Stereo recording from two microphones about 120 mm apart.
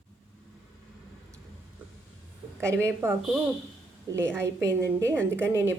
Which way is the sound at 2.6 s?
20° right (ahead or behind).